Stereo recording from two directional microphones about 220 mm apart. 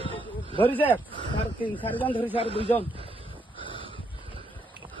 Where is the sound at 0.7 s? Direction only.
10° left (ahead or behind).